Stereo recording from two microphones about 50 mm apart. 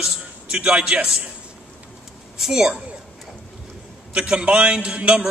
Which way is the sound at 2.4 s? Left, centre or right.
Centre.